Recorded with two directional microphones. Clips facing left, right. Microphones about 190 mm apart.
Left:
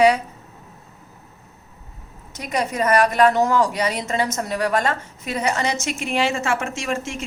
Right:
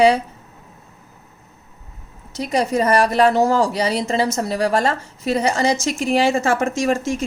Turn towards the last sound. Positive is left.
turn(degrees=-35)  # may be behind; listen again after turning